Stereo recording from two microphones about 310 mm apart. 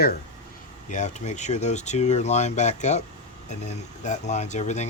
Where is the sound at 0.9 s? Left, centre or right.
Left.